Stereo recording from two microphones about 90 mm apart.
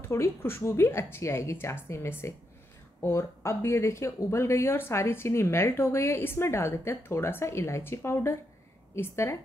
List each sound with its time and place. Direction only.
0.1 s speech: 25° left (ahead or behind)